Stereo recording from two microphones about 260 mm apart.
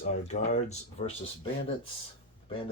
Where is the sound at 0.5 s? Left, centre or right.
Left.